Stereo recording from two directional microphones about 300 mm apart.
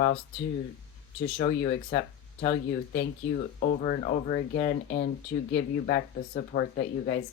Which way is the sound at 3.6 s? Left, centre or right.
Left.